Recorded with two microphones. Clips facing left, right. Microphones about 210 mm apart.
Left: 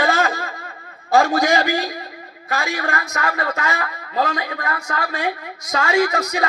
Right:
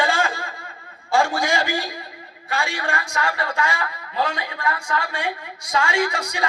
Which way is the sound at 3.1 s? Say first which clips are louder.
Right 1 dB; 40° left (ahead or behind).